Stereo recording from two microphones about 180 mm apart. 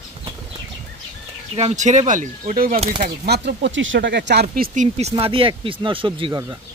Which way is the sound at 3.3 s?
70° right (ahead or behind).